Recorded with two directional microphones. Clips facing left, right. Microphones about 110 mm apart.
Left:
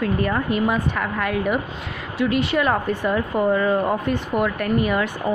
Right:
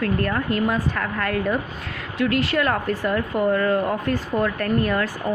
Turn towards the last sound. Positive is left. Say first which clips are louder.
# left 1 dB
turn(degrees=10)  # may be behind; listen again after turning